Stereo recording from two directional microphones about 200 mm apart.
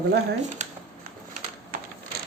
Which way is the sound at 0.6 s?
35° right (ahead or behind).